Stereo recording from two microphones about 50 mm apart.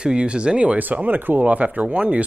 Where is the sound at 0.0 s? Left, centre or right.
Centre.